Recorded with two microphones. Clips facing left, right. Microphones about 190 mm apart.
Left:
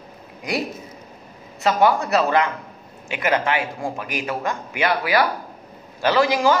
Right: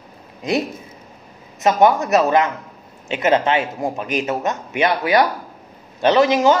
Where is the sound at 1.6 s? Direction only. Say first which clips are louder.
Right 3 dB; 20° right (ahead or behind).